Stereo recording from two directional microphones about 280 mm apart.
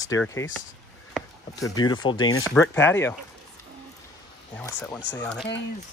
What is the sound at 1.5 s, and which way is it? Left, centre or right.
Speech, centre.